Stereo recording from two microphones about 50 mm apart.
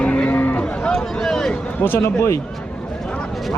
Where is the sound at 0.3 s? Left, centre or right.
Left.